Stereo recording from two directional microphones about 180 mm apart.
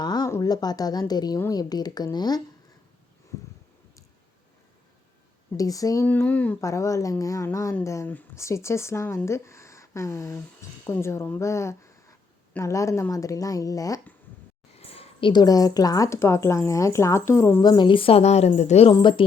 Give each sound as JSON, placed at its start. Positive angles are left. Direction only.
{"t": 0.0, "sound": "a woman's voice", "side_deg": 20}
{"t": 5.5, "sound": "a woman's voice", "side_deg": 20}
{"t": 14.8, "sound": "a woman's voice", "side_deg": 35}
{"t": 18.9, "sound": "a woman's voice", "side_deg": 25}